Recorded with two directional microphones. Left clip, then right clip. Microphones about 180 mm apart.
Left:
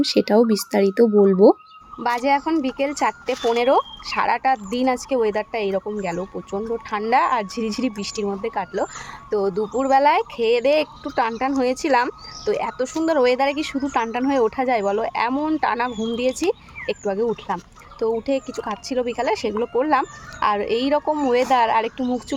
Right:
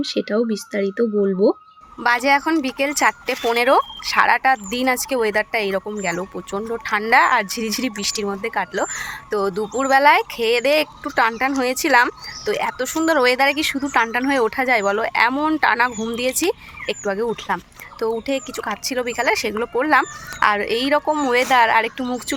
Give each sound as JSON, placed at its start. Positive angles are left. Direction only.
{"t": 0.0, "sound": "speech", "side_deg": 15}
{"t": 18.3, "sound": "speech", "side_deg": 5}